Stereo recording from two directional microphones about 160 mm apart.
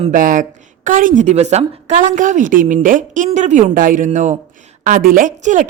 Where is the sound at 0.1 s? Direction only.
55° right (ahead or behind).